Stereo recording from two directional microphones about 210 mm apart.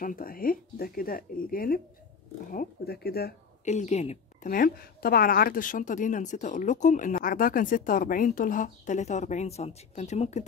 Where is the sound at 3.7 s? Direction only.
30° left (ahead or behind).